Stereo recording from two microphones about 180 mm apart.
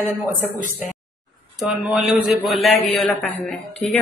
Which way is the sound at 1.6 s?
Centre (ahead or behind).